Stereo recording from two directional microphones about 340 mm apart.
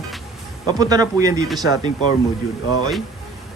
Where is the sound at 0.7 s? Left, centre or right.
Centre.